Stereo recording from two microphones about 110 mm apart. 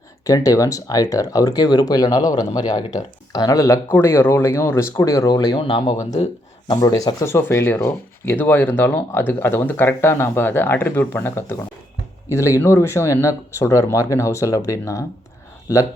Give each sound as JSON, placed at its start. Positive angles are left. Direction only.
{"t": 0.3, "sound": "speech", "side_deg": 30}
{"t": 3.8, "sound": "speech", "side_deg": 20}
{"t": 5.5, "sound": "speech", "side_deg": 50}
{"t": 6.0, "sound": "speech", "side_deg": 90}
{"t": 6.7, "sound": "speech", "side_deg": 35}
{"t": 7.4, "sound": "speech", "side_deg": 20}